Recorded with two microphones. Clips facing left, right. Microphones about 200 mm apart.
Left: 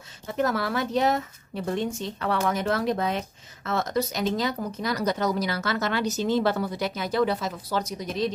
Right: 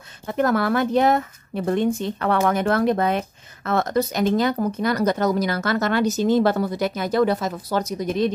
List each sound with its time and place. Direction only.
0.3 s speech: 55° right (ahead or behind)